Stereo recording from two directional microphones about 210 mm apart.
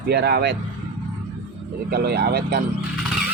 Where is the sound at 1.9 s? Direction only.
50° right (ahead or behind).